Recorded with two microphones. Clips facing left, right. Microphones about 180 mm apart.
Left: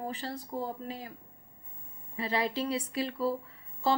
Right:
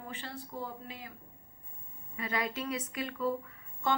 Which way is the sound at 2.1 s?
30° left (ahead or behind).